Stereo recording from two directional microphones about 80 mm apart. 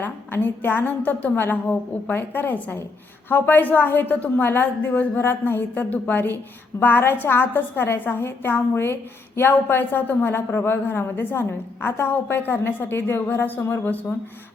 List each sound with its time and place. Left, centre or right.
0.0 s a woman's voice: left